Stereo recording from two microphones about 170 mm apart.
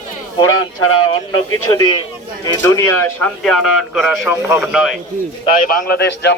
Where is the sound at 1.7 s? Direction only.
25° left (ahead or behind); by 5.0 s centre (ahead or behind).